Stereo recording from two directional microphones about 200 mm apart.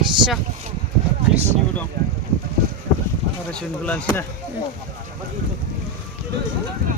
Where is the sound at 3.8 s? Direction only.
5° left (ahead or behind).